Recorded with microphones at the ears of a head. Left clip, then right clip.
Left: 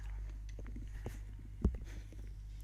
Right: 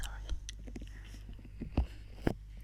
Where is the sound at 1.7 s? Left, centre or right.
Right.